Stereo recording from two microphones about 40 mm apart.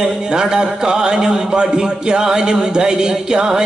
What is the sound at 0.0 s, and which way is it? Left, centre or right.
A man's voice, centre.